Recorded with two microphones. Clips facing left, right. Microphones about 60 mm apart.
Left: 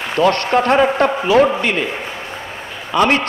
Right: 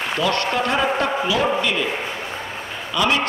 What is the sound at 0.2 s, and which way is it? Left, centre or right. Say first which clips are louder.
A man's voice: left 8 dB; left.